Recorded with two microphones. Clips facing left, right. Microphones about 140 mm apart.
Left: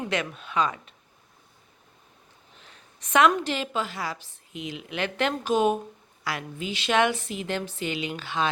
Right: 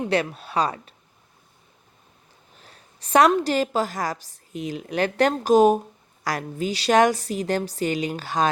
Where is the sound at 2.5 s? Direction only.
35° right (ahead or behind).